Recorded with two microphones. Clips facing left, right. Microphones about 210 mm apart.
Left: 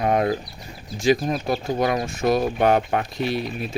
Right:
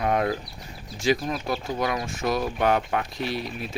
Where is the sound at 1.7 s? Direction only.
40° left (ahead or behind).